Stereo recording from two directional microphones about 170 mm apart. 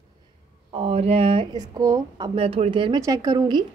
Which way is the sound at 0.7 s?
35° right (ahead or behind).